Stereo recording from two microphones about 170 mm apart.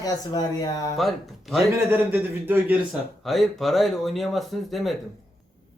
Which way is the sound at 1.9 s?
10° right (ahead or behind).